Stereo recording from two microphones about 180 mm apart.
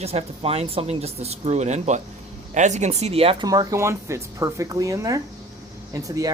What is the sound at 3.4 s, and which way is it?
Speech, 20° right (ahead or behind).